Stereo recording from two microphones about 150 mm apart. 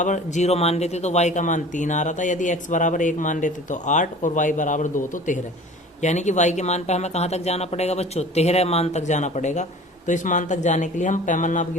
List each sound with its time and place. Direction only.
0.0 s speech: 55° left (ahead or behind)